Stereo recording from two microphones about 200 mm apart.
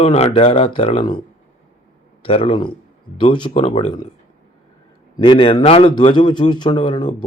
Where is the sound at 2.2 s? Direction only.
25° left (ahead or behind).